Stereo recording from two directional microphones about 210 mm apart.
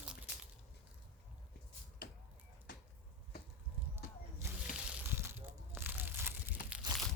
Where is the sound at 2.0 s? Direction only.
45° left (ahead or behind).